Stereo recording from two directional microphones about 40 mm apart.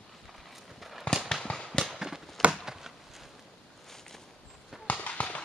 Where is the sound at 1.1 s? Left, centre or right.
Left.